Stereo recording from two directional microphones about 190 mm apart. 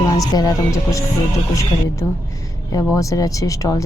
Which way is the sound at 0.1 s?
20° left (ahead or behind).